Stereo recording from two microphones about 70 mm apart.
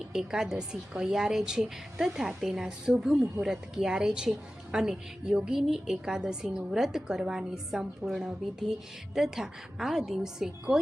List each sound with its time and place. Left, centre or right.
0.1 s a woman's voice: centre